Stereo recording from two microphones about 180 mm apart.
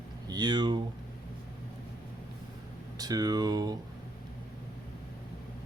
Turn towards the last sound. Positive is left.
turn(degrees=-20)  # may be behind; listen again after turning